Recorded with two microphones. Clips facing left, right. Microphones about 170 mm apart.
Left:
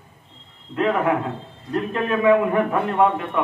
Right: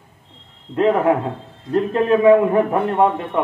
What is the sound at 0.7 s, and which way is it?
A man's voice, 30° right (ahead or behind).